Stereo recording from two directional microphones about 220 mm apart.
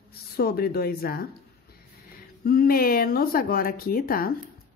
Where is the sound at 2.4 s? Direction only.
40° left (ahead or behind).